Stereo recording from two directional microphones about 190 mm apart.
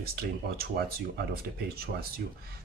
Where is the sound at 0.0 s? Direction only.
55° right (ahead or behind).